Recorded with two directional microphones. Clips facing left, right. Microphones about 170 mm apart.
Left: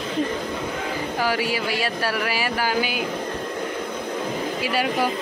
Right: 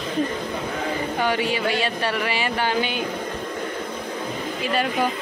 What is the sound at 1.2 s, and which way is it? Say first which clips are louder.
Speech: right 1 dB; 5° left (ahead or behind).